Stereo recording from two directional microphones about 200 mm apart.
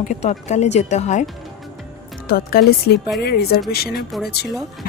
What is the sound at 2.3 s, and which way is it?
Speech, 50° left (ahead or behind).